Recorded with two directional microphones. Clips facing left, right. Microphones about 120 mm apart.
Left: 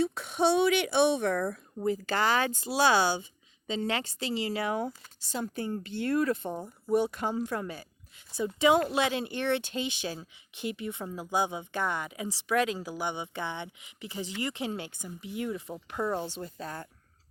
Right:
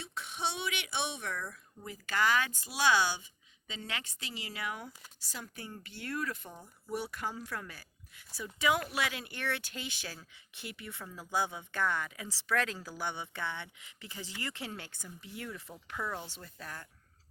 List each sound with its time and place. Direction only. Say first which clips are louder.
0.0 s speech: left 12 dB; 45° left (ahead or behind); by 6.5 s 30° left (ahead or behind)
6.5 s speech: left 13 dB; 40° left (ahead or behind)
6.9 s speech: left 10 dB; 20° left (ahead or behind)